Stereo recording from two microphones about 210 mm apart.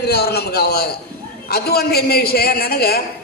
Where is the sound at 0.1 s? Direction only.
50° left (ahead or behind).